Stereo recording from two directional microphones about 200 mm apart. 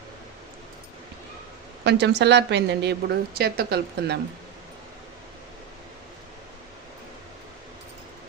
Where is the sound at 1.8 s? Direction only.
60° right (ahead or behind).